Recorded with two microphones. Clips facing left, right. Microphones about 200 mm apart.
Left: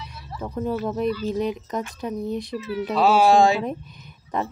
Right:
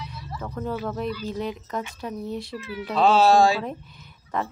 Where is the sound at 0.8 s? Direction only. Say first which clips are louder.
Left 5 dB; 20° left (ahead or behind).